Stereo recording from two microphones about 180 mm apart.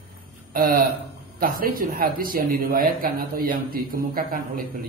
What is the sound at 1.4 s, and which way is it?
A man's voice, 55° right (ahead or behind).